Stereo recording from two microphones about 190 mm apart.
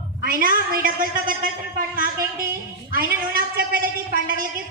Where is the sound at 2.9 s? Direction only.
50° right (ahead or behind).